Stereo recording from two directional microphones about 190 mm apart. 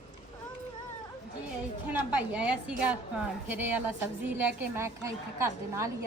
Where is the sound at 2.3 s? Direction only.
5° right (ahead or behind).